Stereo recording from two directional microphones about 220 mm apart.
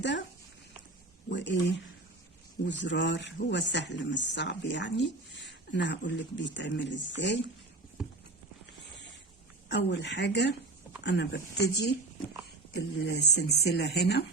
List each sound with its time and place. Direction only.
1.3 s speech: 55° left (ahead or behind)
9.6 s speech: 55° left (ahead or behind)